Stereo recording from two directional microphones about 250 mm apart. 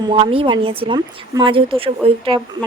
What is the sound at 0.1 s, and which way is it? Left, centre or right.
Speech, right.